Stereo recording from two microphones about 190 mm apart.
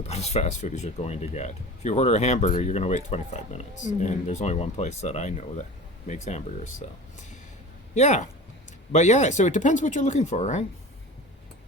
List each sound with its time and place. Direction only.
0.0 s speech: 35° left (ahead or behind)
7.9 s speech: 40° left (ahead or behind)